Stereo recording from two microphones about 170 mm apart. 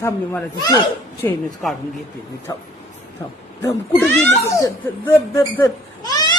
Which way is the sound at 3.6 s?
15° left (ahead or behind).